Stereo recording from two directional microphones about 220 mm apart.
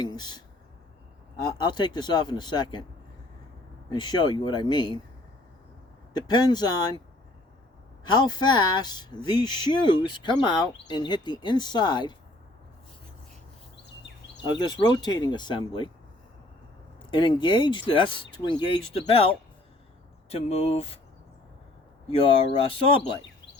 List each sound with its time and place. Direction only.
0.0 s speech: 20° left (ahead or behind)
3.8 s speech: 20° left (ahead or behind)
6.1 s speech: 20° left (ahead or behind)
8.1 s speech: 20° left (ahead or behind)
14.6 s speech: 20° left (ahead or behind)
17.1 s speech: 20° left (ahead or behind)
20.3 s speech: 25° left (ahead or behind)
22.1 s speech: 25° left (ahead or behind)